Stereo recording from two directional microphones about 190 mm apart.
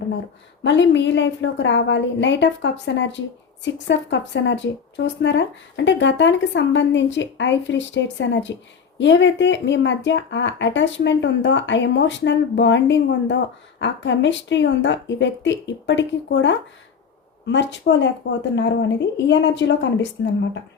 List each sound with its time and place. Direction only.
0.6 s a woman's voice: 70° left (ahead or behind)